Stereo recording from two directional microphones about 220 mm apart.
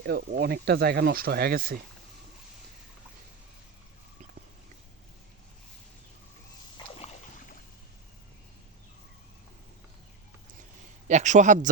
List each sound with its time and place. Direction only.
0.0 s speech: 45° right (ahead or behind)
6.7 s a sound: 25° left (ahead or behind)
11.1 s a man's voice: 35° right (ahead or behind)